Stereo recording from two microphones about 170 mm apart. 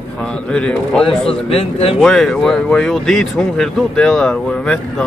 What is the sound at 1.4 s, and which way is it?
Speech, 35° left (ahead or behind).